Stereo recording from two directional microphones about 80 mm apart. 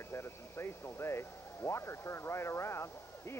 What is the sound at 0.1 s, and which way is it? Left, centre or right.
Speech, left.